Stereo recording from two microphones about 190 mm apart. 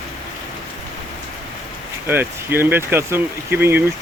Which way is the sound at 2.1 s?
10° right (ahead or behind).